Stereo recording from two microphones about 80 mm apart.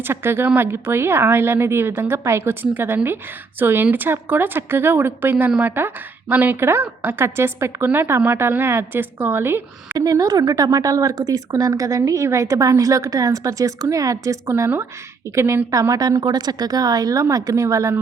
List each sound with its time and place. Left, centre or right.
0.0 s speech: right
10.0 s a woman's voice: right
16.0 s speech: right